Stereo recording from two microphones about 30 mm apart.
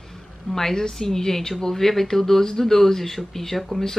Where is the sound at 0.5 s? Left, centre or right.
Centre.